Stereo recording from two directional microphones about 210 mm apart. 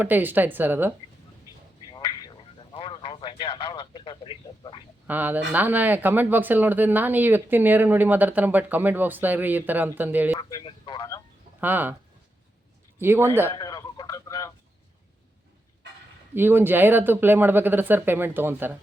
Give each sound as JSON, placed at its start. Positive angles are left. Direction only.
{"t": 0.0, "sound": "speech", "side_deg": -10}
{"t": 1.9, "sound": "a sound", "side_deg": 20}
{"t": 2.7, "sound": "radio", "side_deg": 25}
{"t": 5.0, "sound": "speech", "side_deg": -10}
{"t": 10.3, "sound": "a man's voice", "side_deg": 20}
{"t": 11.6, "sound": "speech", "side_deg": -10}
{"t": 13.0, "sound": "speech", "side_deg": -10}
{"t": 13.5, "sound": "a sound", "side_deg": 20}
{"t": 16.3, "sound": "speech", "side_deg": -10}